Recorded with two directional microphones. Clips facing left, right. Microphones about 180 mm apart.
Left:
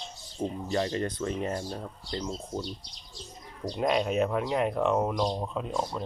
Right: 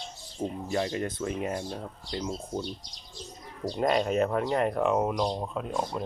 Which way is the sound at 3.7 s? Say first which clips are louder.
Right 1 dB; centre (ahead or behind).